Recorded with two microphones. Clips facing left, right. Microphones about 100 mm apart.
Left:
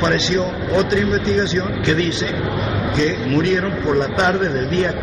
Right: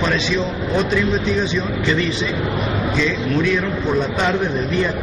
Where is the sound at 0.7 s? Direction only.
20° left (ahead or behind).